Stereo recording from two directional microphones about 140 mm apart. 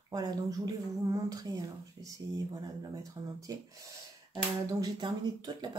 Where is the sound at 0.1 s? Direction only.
25° right (ahead or behind).